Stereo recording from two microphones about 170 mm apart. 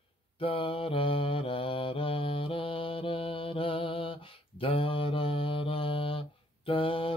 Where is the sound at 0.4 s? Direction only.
30° left (ahead or behind).